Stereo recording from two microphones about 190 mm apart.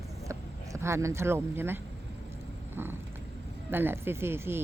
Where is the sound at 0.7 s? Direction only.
15° right (ahead or behind).